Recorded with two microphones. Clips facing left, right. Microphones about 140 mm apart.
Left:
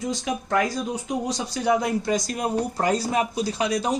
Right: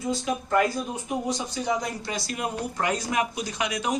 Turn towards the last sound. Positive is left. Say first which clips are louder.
# left 4 dB
turn(degrees=35)  # may be behind; listen again after turning